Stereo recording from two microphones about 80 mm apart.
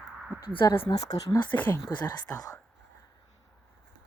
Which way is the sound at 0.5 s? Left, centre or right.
Left.